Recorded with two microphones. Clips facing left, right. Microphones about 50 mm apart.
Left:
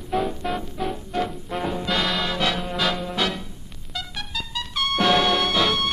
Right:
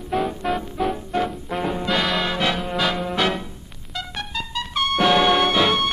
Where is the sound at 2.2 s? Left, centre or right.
Centre.